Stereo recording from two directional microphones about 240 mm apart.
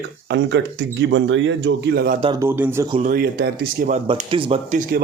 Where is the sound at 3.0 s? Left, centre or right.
Right.